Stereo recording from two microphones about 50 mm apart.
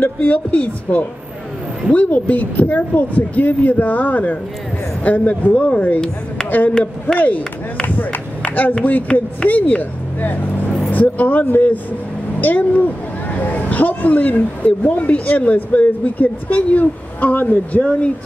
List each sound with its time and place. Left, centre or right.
0.0 s a man's voice: left
7.2 s a man's voice: left
10.9 s speech: left